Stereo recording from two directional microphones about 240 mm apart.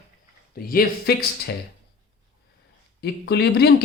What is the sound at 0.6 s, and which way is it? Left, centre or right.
Speech, left.